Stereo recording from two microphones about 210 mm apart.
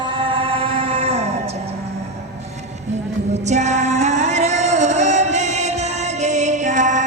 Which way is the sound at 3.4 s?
35° right (ahead or behind).